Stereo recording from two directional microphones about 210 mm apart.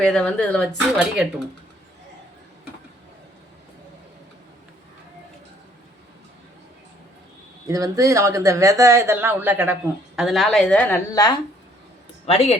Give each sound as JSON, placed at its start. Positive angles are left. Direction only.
{"t": 0.0, "sound": "speech", "side_deg": 5}
{"t": 7.7, "sound": "speech", "side_deg": -15}
{"t": 12.2, "sound": "speech", "side_deg": 30}